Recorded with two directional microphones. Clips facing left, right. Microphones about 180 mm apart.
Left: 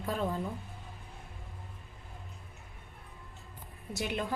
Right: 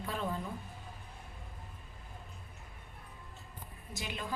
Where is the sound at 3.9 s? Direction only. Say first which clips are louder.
Left 7 dB; 60° left (ahead or behind).